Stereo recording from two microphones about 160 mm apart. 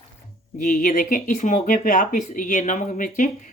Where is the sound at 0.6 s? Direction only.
60° left (ahead or behind).